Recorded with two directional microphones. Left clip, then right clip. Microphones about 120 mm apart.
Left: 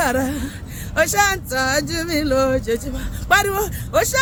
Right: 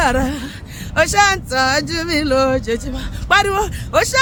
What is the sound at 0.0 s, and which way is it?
Speech, 20° right (ahead or behind).